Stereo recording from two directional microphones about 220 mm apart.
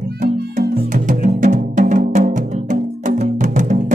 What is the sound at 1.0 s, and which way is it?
Music, 35° right (ahead or behind).